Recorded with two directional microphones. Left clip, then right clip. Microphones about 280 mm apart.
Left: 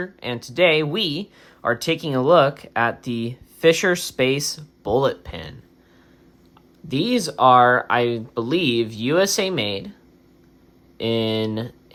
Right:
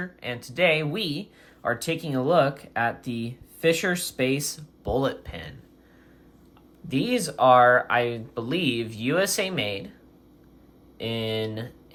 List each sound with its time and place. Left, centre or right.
0.0 s speech: centre
6.8 s speech: centre
10.9 s speech: centre